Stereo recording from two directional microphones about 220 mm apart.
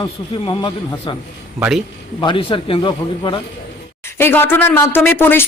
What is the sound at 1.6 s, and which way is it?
Speech, centre (ahead or behind).